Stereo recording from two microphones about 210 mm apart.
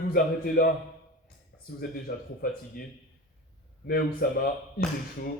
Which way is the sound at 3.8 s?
45° left (ahead or behind).